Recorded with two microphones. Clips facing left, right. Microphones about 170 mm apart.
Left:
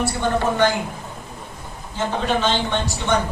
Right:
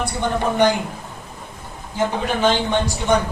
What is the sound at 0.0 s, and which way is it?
Speech, 15° right (ahead or behind).